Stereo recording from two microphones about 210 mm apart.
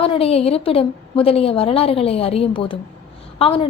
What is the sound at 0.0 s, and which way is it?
A woman's voice, 25° left (ahead or behind).